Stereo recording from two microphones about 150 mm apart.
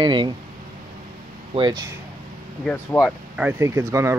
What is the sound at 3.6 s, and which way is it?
Speech, 20° right (ahead or behind).